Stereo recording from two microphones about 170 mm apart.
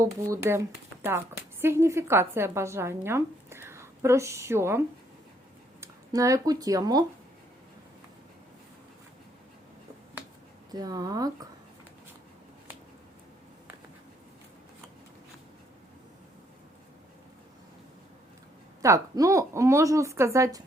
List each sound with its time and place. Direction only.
0.0 s a woman's voice: 15° right (ahead or behind)
1.6 s a woman's voice: 15° right (ahead or behind)
5.8 s speech: 20° right (ahead or behind)
10.7 s speech: 20° right (ahead or behind)
18.8 s a woman's voice: 20° right (ahead or behind)